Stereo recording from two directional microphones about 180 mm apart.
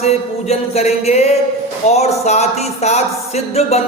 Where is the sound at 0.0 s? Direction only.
35° left (ahead or behind).